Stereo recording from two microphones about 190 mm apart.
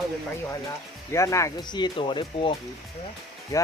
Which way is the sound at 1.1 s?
15° left (ahead or behind).